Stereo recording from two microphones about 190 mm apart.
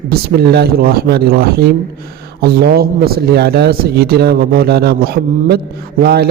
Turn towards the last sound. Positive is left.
turn(degrees=-55)  # may be behind; listen again after turning